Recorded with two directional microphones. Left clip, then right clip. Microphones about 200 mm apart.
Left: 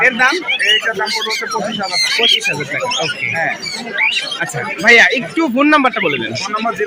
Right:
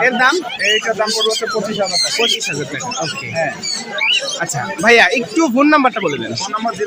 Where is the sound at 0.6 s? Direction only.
40° right (ahead or behind).